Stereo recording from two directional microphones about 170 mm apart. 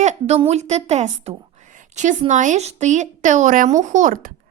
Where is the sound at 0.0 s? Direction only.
40° right (ahead or behind).